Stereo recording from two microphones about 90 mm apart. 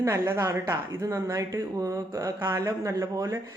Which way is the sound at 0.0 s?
35° right (ahead or behind).